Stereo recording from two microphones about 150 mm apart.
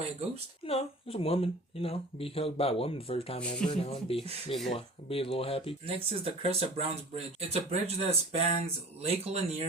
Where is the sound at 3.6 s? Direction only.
5° left (ahead or behind).